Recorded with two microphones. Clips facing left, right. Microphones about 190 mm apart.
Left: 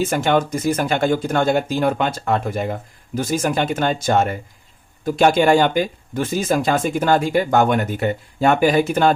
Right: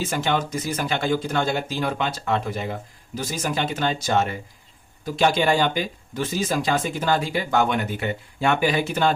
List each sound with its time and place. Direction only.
0.0 s speech: 50° left (ahead or behind)